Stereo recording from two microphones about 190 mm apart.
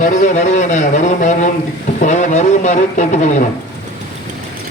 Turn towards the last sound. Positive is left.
turn(degrees=40)  # may be behind; listen again after turning